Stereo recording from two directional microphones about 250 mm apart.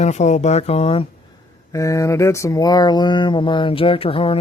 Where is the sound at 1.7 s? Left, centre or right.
Centre.